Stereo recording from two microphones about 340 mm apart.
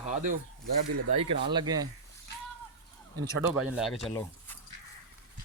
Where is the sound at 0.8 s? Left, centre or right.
Right.